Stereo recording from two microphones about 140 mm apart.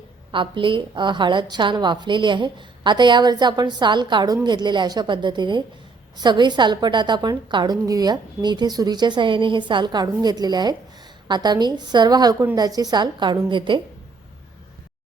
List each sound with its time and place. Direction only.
0.3 s a woman's voice: 35° right (ahead or behind)